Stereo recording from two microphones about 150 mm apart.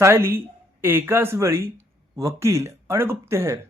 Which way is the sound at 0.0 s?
15° right (ahead or behind).